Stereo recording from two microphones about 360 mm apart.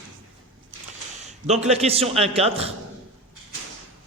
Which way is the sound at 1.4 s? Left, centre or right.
Centre.